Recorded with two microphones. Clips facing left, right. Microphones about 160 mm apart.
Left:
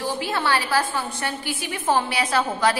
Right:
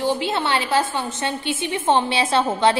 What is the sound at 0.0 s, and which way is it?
A woman's voice, 20° right (ahead or behind).